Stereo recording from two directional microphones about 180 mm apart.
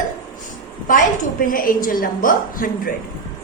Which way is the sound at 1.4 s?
50° left (ahead or behind).